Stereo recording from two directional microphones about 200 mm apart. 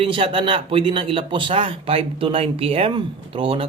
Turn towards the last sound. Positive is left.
turn(degrees=-25)  # may be behind; listen again after turning